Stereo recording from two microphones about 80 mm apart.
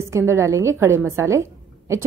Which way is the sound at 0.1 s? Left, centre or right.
Right.